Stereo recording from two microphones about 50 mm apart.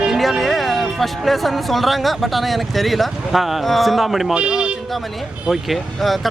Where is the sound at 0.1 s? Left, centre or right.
Centre.